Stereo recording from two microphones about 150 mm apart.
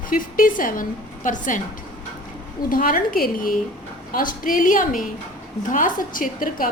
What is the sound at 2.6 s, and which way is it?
A woman's voice, 70° left (ahead or behind).